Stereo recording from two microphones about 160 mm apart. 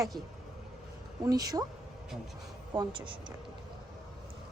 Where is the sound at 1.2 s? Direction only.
25° right (ahead or behind).